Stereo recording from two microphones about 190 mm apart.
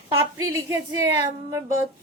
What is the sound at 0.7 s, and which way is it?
Speech, 15° right (ahead or behind).